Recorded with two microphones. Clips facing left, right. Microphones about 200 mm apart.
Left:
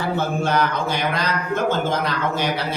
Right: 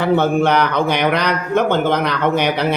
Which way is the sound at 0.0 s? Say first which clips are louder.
Right 8 dB; 65° right (ahead or behind).